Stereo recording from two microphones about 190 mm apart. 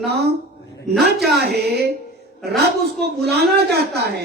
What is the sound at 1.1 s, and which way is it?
Speech, centre (ahead or behind).